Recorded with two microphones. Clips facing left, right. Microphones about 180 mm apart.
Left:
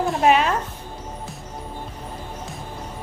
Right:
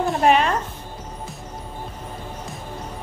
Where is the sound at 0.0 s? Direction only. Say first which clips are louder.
Even; centre (ahead or behind).